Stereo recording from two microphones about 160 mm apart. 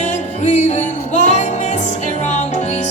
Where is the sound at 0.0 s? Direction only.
50° left (ahead or behind).